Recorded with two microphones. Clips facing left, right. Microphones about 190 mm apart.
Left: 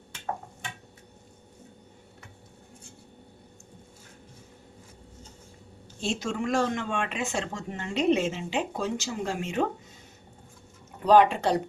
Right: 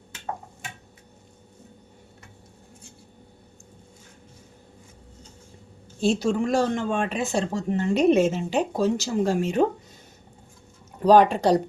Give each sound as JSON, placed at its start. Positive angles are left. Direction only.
{"t": 6.0, "sound": "speech", "side_deg": -35}
{"t": 11.0, "sound": "speech", "side_deg": -40}